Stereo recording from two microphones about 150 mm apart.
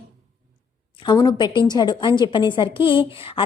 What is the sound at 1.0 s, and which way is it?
A woman's voice, 30° left (ahead or behind).